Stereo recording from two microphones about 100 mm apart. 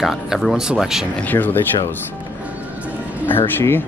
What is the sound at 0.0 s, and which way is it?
Speech, centre (ahead or behind).